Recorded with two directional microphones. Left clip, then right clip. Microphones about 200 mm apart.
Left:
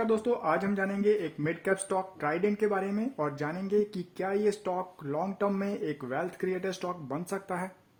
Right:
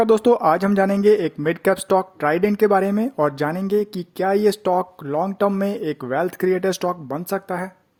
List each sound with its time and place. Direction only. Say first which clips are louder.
0.0 s speech: right 13 dB; 45° right (ahead or behind); by 7.7 s 25° right (ahead or behind)